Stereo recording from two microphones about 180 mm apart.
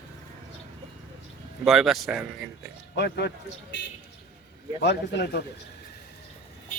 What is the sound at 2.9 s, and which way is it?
Speech, 70° left (ahead or behind).